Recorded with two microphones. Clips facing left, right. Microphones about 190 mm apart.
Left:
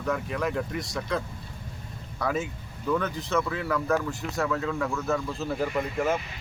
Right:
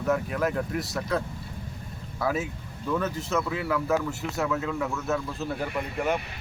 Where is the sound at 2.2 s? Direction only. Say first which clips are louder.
Right 1 dB; 5° right (ahead or behind).